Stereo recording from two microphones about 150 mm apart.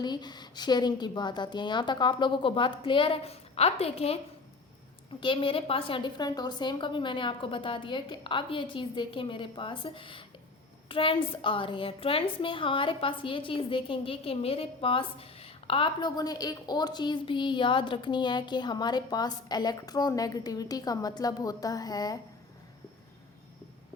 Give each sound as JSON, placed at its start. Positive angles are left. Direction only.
{"t": 0.0, "sound": "a woman's voice", "side_deg": 30}
{"t": 5.2, "sound": "a woman's voice", "side_deg": 35}